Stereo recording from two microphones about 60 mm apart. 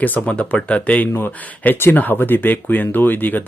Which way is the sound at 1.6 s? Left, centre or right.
Left.